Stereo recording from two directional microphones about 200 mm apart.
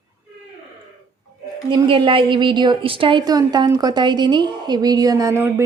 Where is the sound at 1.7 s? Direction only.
25° right (ahead or behind).